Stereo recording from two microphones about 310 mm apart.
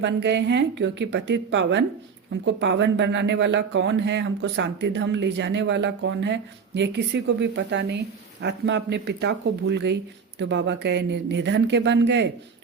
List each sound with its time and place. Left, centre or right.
0.0 s speech: right